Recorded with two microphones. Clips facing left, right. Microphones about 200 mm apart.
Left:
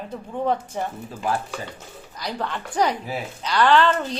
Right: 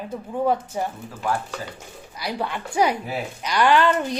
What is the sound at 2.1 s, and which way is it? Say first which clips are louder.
Speech: right 1 dB; 10° right (ahead or behind).